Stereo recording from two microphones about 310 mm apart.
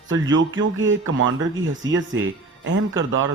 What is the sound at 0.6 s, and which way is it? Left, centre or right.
Speech, right.